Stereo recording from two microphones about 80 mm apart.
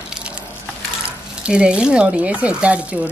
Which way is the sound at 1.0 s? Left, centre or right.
Centre.